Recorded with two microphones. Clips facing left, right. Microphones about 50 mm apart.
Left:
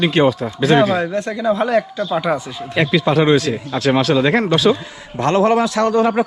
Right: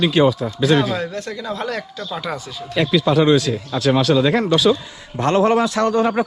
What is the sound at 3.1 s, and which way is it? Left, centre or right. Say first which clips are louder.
Speech: even; left.